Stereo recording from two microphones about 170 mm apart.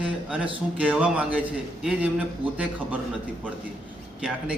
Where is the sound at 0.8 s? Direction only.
10° right (ahead or behind).